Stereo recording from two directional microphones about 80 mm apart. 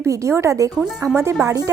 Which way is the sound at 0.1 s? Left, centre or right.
Right.